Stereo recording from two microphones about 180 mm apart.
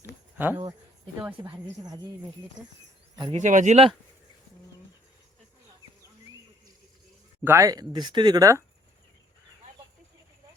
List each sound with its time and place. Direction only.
0.3 s speech: 10° right (ahead or behind)
3.3 s speech: 45° right (ahead or behind)
7.4 s speech: 15° right (ahead or behind)